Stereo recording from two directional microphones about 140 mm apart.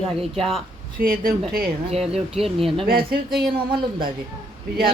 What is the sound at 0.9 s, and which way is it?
Speech, 90° right.